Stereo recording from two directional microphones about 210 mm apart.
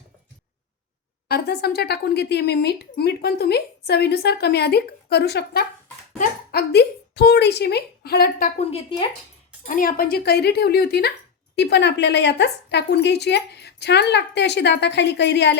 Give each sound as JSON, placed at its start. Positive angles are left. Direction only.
{"t": 1.3, "sound": "a woman's voice", "side_deg": 50}
{"t": 8.5, "sound": "speech", "side_deg": 30}
{"t": 9.6, "sound": "a woman's voice", "side_deg": 40}